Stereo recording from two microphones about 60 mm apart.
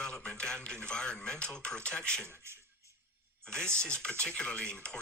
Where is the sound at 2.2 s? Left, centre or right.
Right.